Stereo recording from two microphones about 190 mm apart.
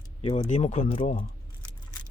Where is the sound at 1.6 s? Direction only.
25° left (ahead or behind).